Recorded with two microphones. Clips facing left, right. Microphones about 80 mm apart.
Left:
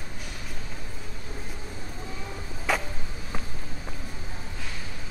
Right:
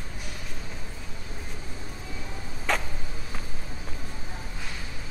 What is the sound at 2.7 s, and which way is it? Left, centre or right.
Vehicle, centre.